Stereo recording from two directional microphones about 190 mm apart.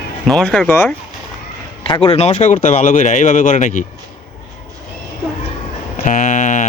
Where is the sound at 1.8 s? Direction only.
25° left (ahead or behind).